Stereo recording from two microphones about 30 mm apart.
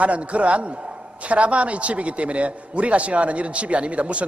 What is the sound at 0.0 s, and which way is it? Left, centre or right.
A man's voice, right.